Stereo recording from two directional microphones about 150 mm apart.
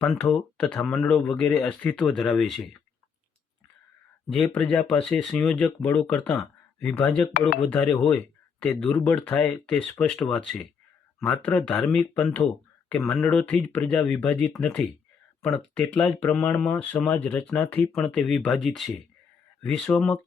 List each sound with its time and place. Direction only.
0.0 s speech: 5° left (ahead or behind)
4.3 s speech: 5° left (ahead or behind)
12.2 s speech: 20° left (ahead or behind)
12.9 s speech: 5° left (ahead or behind)